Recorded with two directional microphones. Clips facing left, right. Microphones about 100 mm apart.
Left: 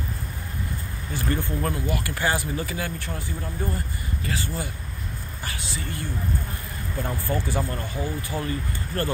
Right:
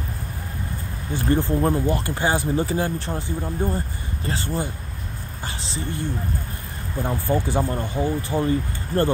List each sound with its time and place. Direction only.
1.1 s speech: 30° right (ahead or behind)
7.0 s speech: 20° right (ahead or behind)